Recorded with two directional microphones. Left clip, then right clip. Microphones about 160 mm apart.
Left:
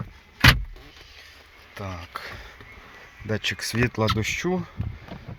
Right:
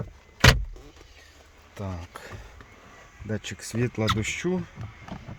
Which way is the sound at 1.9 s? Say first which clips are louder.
Left 5 dB; 30° right (ahead or behind).